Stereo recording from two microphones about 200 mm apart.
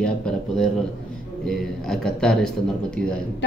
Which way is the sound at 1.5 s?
5° left (ahead or behind).